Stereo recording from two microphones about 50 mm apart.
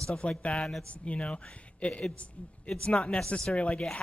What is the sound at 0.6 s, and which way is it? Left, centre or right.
Speech, centre.